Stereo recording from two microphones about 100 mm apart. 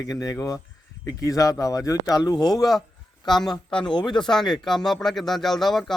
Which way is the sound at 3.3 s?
5° left (ahead or behind).